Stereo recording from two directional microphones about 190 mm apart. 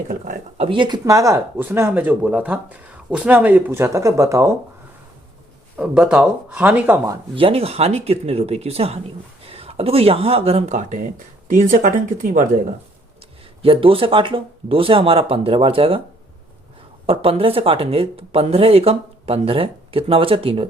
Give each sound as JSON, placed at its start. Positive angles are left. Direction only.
{"t": 0.5, "sound": "speech", "side_deg": -30}
{"t": 5.7, "sound": "speech", "side_deg": -5}
{"t": 13.6, "sound": "speech", "side_deg": -30}
{"t": 17.1, "sound": "speech", "side_deg": -30}